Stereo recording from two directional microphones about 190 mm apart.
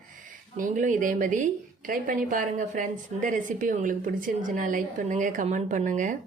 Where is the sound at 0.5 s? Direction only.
45° right (ahead or behind).